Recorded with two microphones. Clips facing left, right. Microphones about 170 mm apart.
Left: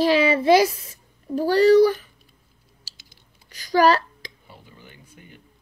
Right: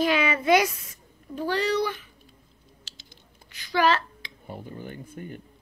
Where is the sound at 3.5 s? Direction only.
40° left (ahead or behind).